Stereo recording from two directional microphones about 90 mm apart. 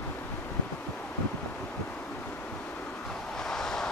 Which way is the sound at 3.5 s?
5° left (ahead or behind).